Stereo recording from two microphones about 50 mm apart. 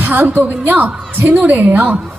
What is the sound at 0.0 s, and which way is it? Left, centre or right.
A woman's voice, right.